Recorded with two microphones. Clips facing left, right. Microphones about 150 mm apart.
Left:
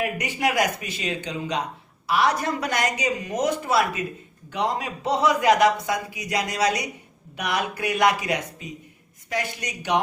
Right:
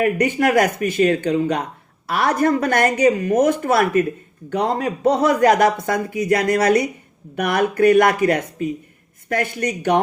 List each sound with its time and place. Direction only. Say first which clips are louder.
0.0 s a man's voice: right 8 dB; 55° right (ahead or behind)